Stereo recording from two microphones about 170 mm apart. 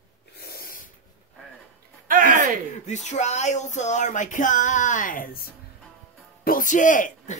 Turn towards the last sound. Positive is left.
turn(degrees=45)  # may be behind; listen again after turning